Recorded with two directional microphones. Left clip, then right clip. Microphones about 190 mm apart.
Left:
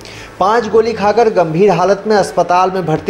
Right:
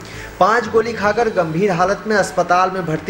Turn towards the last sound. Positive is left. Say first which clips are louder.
# left 4 dB
turn(degrees=25)  # may be behind; listen again after turning